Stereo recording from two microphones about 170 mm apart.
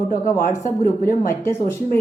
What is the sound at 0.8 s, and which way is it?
Speech, 55° left (ahead or behind).